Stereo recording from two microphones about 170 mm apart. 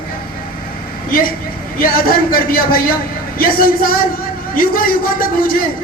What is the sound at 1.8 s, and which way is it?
A woman's voice, 60° left (ahead or behind).